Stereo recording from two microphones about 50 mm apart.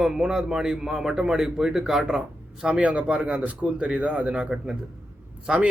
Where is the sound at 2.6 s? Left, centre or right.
Right.